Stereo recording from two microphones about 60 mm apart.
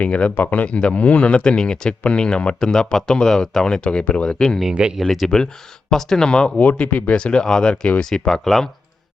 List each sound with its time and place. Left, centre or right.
0.0 s speech: left
4.7 s speech: centre
5.2 s speech: centre
6.6 s speech: left
7.2 s speech: centre
8.3 s speech: centre